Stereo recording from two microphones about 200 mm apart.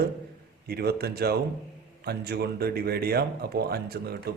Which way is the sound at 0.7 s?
50° right (ahead or behind).